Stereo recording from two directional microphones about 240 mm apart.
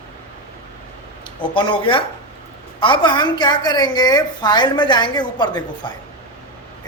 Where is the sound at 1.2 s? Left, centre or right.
Left.